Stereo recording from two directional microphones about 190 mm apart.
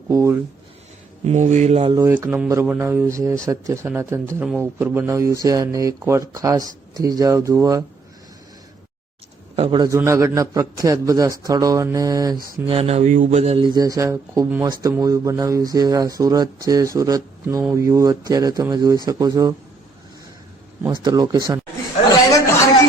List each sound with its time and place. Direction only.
0.1 s speech: 15° right (ahead or behind)
1.2 s speech: 35° right (ahead or behind)
2.0 s speech: 15° right (ahead or behind)
9.6 s a man's voice: 25° right (ahead or behind)
12.6 s a man's voice: 30° right (ahead or behind)
20.8 s a man's voice: 20° right (ahead or behind)